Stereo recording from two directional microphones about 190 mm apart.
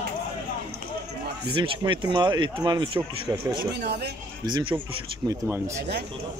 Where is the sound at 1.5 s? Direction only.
25° right (ahead or behind).